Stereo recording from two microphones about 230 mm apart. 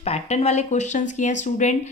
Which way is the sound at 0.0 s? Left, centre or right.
Left.